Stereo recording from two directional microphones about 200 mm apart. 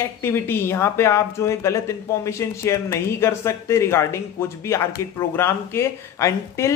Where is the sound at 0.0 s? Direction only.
10° left (ahead or behind).